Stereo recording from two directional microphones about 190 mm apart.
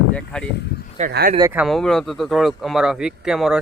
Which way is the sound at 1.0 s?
35° right (ahead or behind).